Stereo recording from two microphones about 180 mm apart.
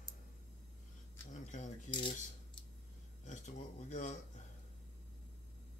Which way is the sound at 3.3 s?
40° left (ahead or behind).